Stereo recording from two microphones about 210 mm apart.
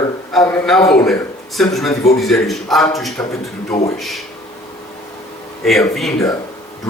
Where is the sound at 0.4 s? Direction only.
5° left (ahead or behind).